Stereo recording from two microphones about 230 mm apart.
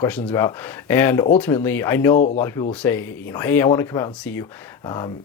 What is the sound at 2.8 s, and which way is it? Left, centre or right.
Speech, centre.